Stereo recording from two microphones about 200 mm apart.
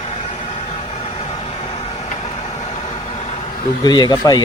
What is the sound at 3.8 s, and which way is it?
Speech, 20° left (ahead or behind).